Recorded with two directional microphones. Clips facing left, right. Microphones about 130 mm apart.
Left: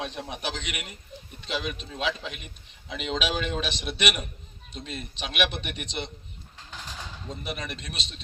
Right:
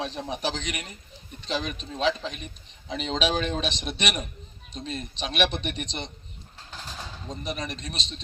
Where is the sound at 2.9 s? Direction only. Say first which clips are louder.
Right 3 dB; 35° right (ahead or behind).